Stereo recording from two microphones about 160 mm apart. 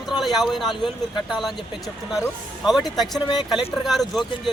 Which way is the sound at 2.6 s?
Centre (ahead or behind).